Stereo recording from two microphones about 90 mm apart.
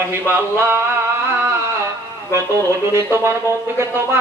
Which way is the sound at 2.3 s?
35° right (ahead or behind).